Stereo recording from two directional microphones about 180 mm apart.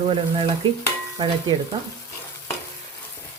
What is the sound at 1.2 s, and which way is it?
Stir, 25° right (ahead or behind).